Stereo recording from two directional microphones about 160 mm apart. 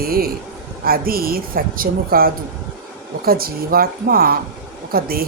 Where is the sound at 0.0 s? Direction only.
70° right (ahead or behind).